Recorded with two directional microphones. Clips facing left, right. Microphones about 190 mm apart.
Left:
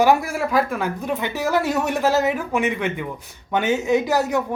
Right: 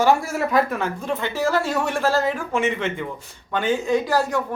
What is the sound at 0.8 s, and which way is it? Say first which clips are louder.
Speech: left 1 dB; 15° left (ahead or behind).